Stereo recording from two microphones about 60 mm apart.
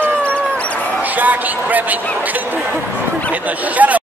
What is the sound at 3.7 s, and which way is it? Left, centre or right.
Speech, right.